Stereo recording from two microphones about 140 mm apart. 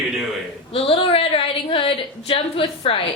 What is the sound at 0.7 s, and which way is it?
A woman's voice, 40° left (ahead or behind).